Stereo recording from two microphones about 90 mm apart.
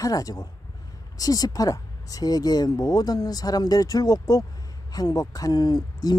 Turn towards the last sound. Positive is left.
turn(degrees=50)  # may be behind; listen again after turning